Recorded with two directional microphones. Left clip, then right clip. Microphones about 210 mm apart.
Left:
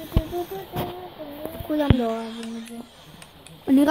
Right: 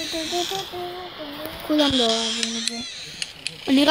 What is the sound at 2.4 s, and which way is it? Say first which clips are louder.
Speech: right 11 dB; 15° right (ahead or behind).